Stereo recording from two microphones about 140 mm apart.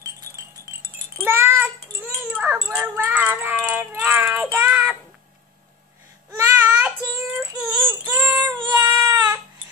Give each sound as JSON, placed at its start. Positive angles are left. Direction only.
{"t": 0.0, "sound": "wind chime", "side_deg": -20}
{"t": 6.3, "sound": "child singing", "side_deg": -15}
{"t": 8.5, "sound": "cat", "side_deg": -30}